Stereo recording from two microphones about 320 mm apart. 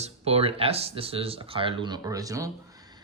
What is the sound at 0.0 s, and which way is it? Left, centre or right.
Speech, centre.